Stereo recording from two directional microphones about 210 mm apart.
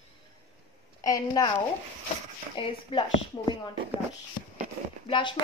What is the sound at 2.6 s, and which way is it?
Speech, 25° left (ahead or behind).